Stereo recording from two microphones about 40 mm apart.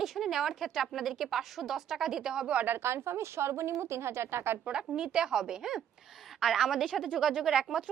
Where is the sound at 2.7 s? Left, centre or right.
Right.